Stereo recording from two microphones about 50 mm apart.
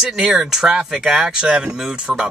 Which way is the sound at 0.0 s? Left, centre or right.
Centre.